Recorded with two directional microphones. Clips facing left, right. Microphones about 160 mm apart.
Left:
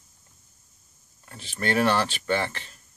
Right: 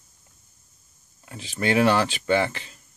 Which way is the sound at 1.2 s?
15° right (ahead or behind).